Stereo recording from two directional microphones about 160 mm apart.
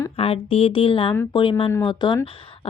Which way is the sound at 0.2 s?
35° left (ahead or behind).